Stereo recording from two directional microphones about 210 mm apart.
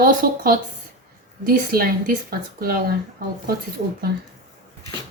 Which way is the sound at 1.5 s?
45° right (ahead or behind).